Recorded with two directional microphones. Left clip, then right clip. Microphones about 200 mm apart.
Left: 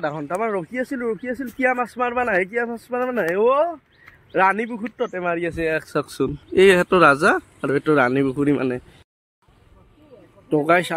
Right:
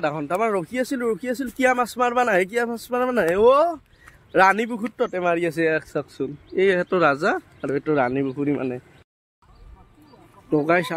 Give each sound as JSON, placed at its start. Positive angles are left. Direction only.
{"t": 0.0, "sound": "speech", "side_deg": -5}
{"t": 5.9, "sound": "speech", "side_deg": 35}
{"t": 10.5, "sound": "speech", "side_deg": 0}